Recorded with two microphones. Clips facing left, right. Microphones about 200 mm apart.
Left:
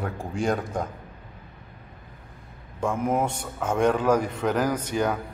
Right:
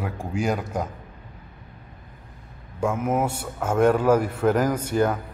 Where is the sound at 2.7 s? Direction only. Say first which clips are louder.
Right 1 dB; 5° right (ahead or behind).